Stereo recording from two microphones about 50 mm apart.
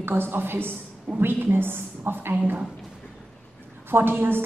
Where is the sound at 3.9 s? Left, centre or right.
Right.